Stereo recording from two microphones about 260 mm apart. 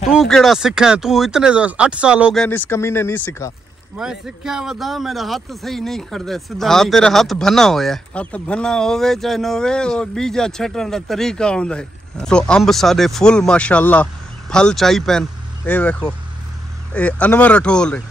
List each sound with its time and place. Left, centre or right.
0.1 s speech: centre
4.0 s speech: centre